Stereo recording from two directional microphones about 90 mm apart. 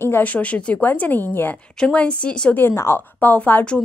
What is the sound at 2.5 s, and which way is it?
A woman's voice, 25° left (ahead or behind).